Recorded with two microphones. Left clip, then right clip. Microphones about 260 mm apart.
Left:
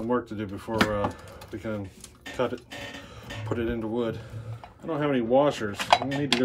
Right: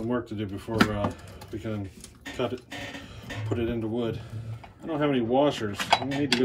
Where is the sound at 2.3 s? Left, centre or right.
Left.